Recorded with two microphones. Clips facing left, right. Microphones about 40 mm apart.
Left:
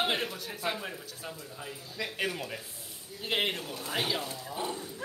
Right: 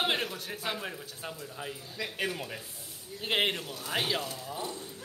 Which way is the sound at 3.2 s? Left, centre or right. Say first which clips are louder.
Right 2 dB; centre.